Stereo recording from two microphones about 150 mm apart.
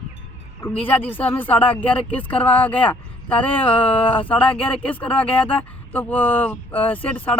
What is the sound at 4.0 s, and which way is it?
Speech, 35° left (ahead or behind).